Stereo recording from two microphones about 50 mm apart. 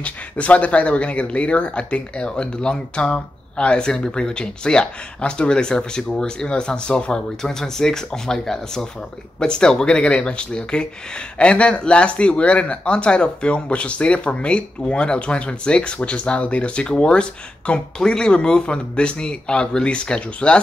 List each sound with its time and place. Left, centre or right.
0.0 s speech: left